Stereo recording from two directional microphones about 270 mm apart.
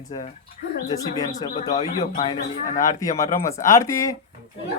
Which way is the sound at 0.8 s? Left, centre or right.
Centre.